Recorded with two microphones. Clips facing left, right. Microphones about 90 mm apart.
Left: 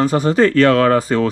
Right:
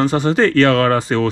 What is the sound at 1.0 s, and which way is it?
Speech, 40° left (ahead or behind).